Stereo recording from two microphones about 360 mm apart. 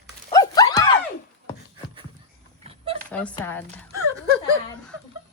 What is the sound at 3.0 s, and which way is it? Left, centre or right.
Speech, centre.